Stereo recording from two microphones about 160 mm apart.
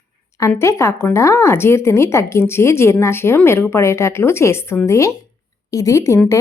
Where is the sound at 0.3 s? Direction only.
20° left (ahead or behind).